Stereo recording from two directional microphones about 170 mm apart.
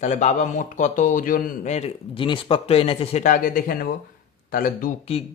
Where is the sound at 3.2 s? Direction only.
55° left (ahead or behind).